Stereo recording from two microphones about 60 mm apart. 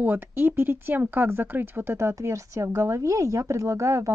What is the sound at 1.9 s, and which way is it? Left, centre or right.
Speech, right.